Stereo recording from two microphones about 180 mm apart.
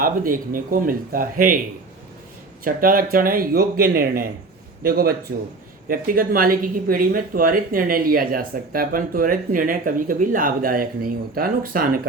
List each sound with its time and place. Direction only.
0.0 s speech: 50° right (ahead or behind)
2.6 s speech: 50° right (ahead or behind)